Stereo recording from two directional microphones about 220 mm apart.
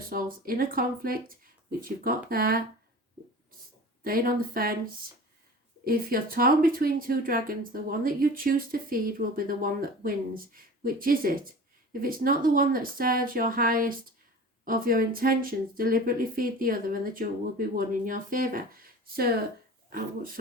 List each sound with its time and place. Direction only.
0.1 s speech: 40° right (ahead or behind)
4.0 s speech: 40° right (ahead or behind)
5.8 s speech: 40° right (ahead or behind)